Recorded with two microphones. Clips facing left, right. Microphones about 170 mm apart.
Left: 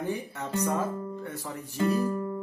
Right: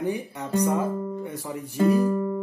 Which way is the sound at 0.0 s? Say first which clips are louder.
Right 4 dB; 15° right (ahead or behind).